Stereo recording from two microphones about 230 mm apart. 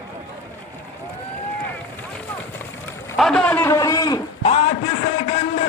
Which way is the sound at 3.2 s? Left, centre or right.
Centre.